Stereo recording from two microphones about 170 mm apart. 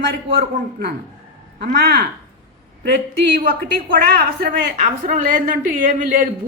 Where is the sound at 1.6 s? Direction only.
65° right (ahead or behind).